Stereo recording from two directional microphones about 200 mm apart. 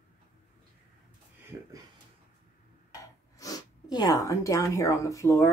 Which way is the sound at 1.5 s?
15° right (ahead or behind).